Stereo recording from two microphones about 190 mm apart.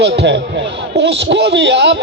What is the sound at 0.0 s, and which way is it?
A man's voice, 65° right (ahead or behind).